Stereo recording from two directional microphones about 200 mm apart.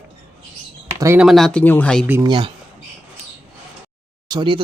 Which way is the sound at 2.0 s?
10° right (ahead or behind).